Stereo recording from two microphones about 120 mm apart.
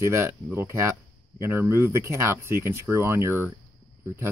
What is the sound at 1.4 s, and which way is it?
Speech, 20° right (ahead or behind).